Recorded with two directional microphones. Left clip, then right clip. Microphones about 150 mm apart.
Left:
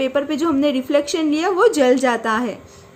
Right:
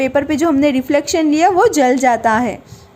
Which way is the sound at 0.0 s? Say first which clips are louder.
Right 4 dB; 35° right (ahead or behind).